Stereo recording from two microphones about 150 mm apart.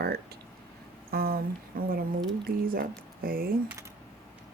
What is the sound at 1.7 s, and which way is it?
Speech, 75° right (ahead or behind).